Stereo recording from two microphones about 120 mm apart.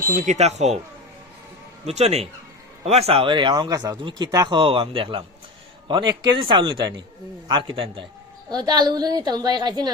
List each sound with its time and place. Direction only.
0.2 s speech: 75° right (ahead or behind)
1.9 s a woman's voice: 65° right (ahead or behind); by 8.0 s 45° right (ahead or behind)
8.4 s a woman's voice: 35° right (ahead or behind)